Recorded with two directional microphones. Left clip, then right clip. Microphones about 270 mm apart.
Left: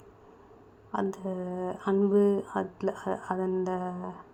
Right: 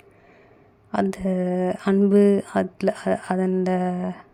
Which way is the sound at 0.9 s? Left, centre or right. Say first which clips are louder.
Right 8 dB; right.